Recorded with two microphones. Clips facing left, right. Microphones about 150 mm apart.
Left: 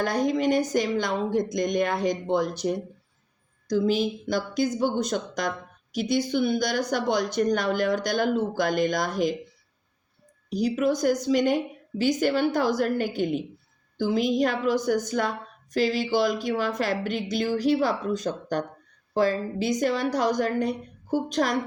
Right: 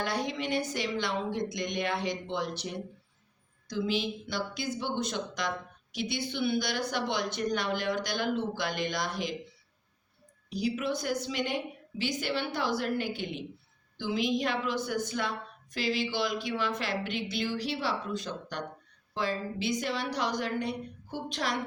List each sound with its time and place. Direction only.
0.0 s speech: 45° left (ahead or behind)
10.5 s speech: 45° left (ahead or behind)